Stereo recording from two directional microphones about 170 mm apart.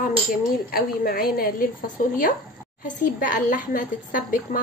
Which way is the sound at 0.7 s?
60° left (ahead or behind).